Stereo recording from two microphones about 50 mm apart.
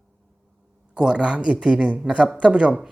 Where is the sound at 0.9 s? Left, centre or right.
Centre.